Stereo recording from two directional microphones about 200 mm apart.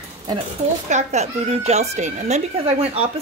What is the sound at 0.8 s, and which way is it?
Speech, 35° right (ahead or behind).